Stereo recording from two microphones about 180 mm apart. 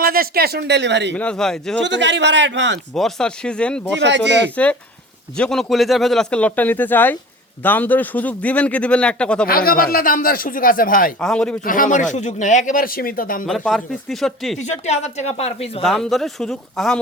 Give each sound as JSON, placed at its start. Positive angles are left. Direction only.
{"t": 0.0, "sound": "speech", "side_deg": -55}
{"t": 1.1, "sound": "speech", "side_deg": 5}
{"t": 1.8, "sound": "a man's voice", "side_deg": -80}
{"t": 2.9, "sound": "speech", "side_deg": 5}
{"t": 4.0, "sound": "speech", "side_deg": -75}
{"t": 4.5, "sound": "speech", "side_deg": 5}
{"t": 9.5, "sound": "speech", "side_deg": 55}
{"t": 11.2, "sound": "speech", "side_deg": 5}
{"t": 11.6, "sound": "speech", "side_deg": 50}
{"t": 13.4, "sound": "speech", "side_deg": 0}
{"t": 14.6, "sound": "speech", "side_deg": 40}
{"t": 15.8, "sound": "speech", "side_deg": 0}